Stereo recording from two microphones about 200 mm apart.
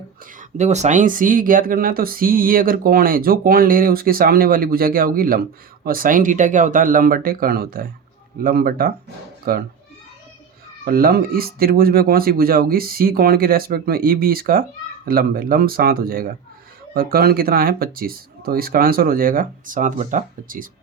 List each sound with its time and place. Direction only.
0.3 s speech: 35° right (ahead or behind)
10.8 s speech: 45° right (ahead or behind)